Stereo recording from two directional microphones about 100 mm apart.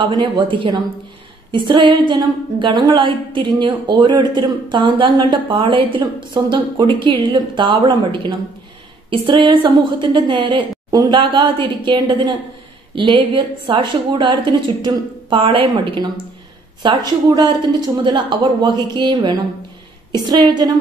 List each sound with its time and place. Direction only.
0.0 s a woman's voice: 50° right (ahead or behind)
10.9 s a woman's voice: 40° right (ahead or behind)
11.1 s a woman's voice: 55° right (ahead or behind)